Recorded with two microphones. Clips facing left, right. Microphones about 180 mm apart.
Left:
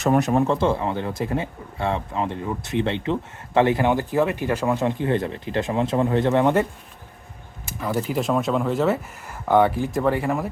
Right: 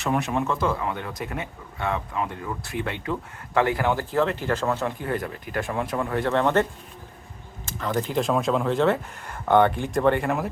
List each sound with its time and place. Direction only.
0.0 s speech: 40° left (ahead or behind); by 10.5 s centre (ahead or behind)